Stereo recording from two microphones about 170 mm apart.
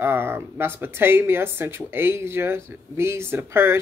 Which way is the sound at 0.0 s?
15° right (ahead or behind).